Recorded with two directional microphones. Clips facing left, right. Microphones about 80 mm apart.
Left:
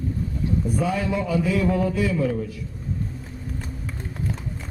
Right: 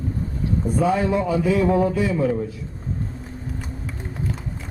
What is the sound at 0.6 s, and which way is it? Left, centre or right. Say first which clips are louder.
A man's voice: right 7 dB; right.